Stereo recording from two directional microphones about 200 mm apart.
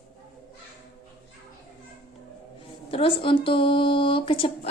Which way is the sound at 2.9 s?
25° left (ahead or behind).